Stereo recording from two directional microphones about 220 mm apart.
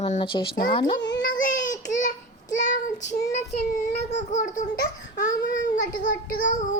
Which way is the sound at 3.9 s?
35° left (ahead or behind).